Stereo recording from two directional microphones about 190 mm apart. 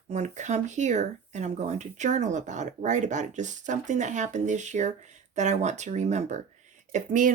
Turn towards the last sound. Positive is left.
turn(degrees=-40)  # may be behind; listen again after turning